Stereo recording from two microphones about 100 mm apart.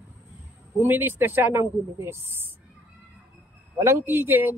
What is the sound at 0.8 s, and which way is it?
Speech, 20° right (ahead or behind).